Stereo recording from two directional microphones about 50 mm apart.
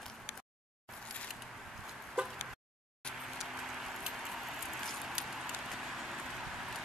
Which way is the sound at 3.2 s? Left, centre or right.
Centre.